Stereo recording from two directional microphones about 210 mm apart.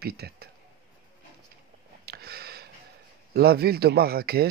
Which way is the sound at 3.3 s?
50° right (ahead or behind).